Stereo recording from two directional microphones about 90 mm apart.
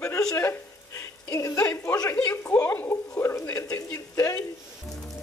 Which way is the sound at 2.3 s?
25° left (ahead or behind).